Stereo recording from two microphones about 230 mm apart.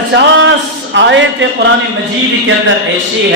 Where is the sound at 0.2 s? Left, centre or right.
Right.